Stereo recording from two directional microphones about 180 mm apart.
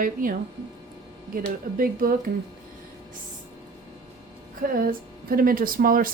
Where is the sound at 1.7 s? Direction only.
50° right (ahead or behind).